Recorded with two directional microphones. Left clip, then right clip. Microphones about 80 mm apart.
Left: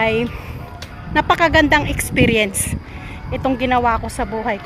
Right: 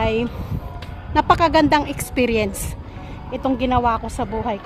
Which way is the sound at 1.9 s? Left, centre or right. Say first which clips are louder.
Left 4 dB; centre.